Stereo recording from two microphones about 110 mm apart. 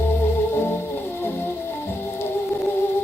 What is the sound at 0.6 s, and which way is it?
Music, 20° left (ahead or behind).